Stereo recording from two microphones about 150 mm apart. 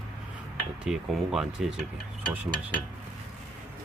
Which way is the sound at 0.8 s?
5° right (ahead or behind).